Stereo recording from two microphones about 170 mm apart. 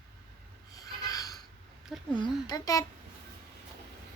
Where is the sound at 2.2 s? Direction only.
25° left (ahead or behind).